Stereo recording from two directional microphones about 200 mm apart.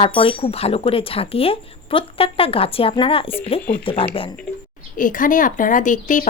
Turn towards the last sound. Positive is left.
turn(degrees=40)  # may be behind; listen again after turning